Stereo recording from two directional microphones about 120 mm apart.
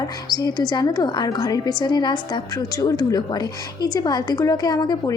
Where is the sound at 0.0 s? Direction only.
30° left (ahead or behind).